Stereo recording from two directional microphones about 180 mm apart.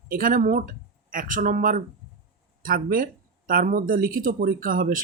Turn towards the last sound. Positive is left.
turn(degrees=-50)  # may be behind; listen again after turning